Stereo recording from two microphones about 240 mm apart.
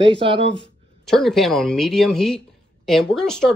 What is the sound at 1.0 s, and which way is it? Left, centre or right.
Speech, centre.